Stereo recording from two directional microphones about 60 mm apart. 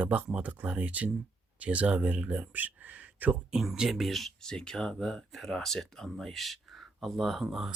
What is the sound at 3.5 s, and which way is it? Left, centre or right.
Speech, centre.